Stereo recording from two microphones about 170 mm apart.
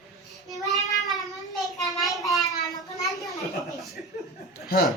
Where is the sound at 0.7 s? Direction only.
Centre (ahead or behind).